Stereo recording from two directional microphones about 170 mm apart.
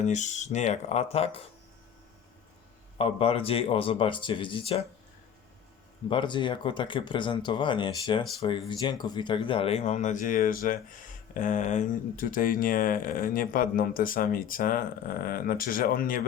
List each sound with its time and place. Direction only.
0.0 s speech: 45° left (ahead or behind)
3.0 s speech: 35° left (ahead or behind)
6.1 s speech: 30° left (ahead or behind); by 16.2 s 55° left (ahead or behind)